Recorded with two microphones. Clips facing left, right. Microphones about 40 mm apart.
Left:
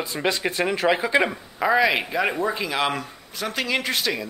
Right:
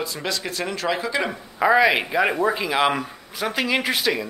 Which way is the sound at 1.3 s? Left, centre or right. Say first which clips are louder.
Right 3 dB; centre.